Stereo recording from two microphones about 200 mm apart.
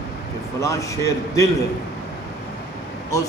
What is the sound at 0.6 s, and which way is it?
Speech, 15° left (ahead or behind).